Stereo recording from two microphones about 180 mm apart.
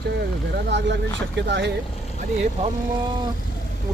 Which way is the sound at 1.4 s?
75° right (ahead or behind).